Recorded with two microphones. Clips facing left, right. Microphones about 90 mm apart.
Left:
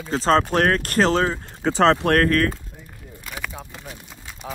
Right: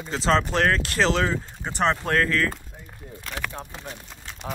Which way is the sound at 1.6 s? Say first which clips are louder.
Left 8 dB; 90° left.